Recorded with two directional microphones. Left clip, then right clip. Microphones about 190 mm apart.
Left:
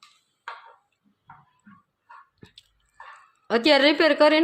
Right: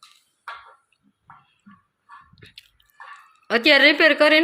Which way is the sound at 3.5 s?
20° left (ahead or behind).